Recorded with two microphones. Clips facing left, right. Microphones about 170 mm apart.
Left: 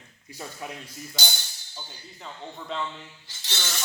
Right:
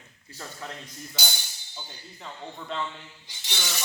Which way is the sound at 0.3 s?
15° left (ahead or behind).